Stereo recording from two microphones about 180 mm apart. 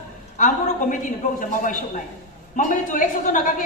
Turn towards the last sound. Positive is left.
turn(degrees=45)  # may be behind; listen again after turning